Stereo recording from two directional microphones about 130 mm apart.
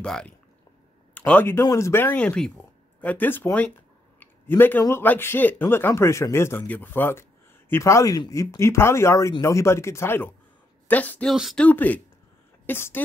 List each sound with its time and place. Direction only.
0.0 s a man's voice: 5° left (ahead or behind)
4.2 s a sound: 15° left (ahead or behind)
4.8 s speech: 15° left (ahead or behind)
11.3 s speech: centre (ahead or behind)
11.6 s speech: 10° left (ahead or behind)